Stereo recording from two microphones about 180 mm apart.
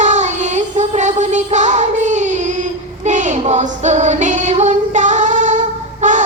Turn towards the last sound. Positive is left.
turn(degrees=-45)  # may be behind; listen again after turning